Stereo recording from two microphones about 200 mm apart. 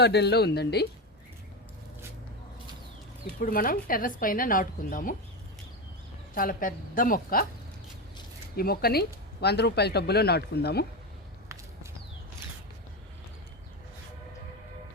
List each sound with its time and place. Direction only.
0.0 s speech: 55° left (ahead or behind)
3.4 s speech: 45° left (ahead or behind)
6.3 s speech: 45° left (ahead or behind)
8.5 s speech: 50° left (ahead or behind)